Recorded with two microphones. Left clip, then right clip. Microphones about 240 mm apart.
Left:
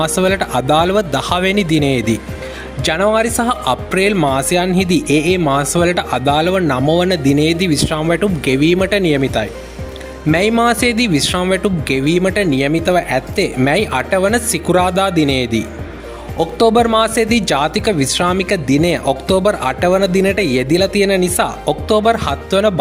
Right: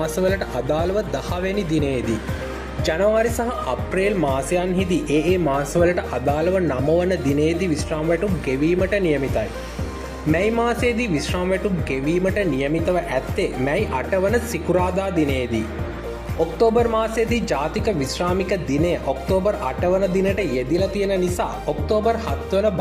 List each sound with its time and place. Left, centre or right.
0.0 s speech: left